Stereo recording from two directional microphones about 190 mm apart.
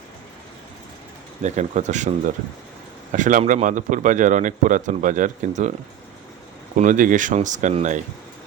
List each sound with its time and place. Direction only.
1.4 s a man's voice: 40° right (ahead or behind)
6.7 s a man's voice: 40° right (ahead or behind)